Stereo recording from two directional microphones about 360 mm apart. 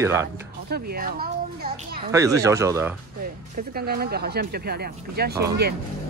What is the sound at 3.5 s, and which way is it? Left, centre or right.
Speech, right.